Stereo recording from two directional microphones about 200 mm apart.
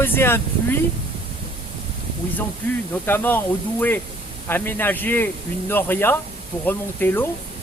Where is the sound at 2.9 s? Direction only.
10° left (ahead or behind).